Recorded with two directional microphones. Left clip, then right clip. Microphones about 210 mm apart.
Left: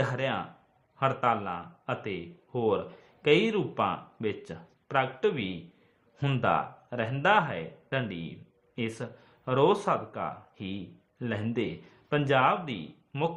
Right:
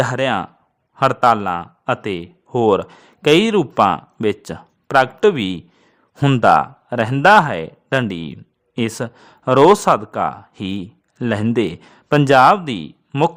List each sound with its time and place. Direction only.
0.0 s a man's voice: 45° right (ahead or behind)